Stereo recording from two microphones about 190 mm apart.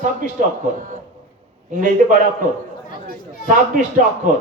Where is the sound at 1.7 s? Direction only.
45° right (ahead or behind).